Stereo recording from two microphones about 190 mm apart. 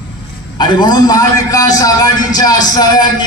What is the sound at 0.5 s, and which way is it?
A man's voice, 25° left (ahead or behind).